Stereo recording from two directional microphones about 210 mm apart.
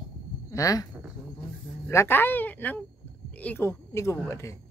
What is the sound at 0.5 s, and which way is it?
Speech, 15° left (ahead or behind).